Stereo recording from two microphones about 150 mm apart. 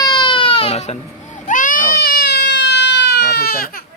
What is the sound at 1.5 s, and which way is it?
Baby cry, 60° left (ahead or behind).